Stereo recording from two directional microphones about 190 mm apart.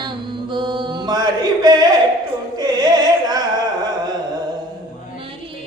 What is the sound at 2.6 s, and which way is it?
Music, 20° right (ahead or behind).